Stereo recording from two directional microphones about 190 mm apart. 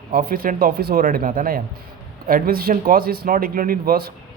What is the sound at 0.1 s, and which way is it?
A man's voice, 50° right (ahead or behind).